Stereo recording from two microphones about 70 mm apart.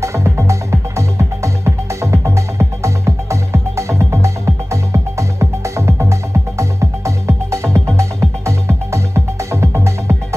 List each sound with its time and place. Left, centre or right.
0.0 s music: right